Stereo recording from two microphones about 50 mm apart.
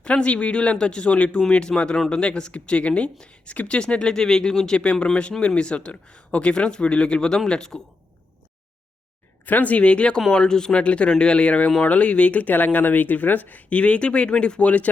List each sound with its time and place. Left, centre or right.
0.0 s speech: left
9.5 s speech: left